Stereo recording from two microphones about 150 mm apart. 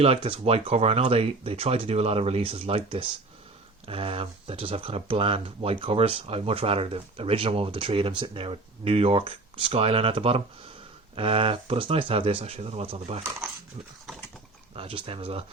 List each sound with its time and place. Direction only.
0.0 s speech: 40° right (ahead or behind)
14.8 s speech: 35° right (ahead or behind)